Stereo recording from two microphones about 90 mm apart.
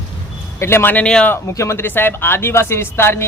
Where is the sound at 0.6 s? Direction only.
25° left (ahead or behind).